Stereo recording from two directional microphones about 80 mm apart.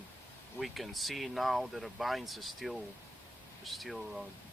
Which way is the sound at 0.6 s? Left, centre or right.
Centre.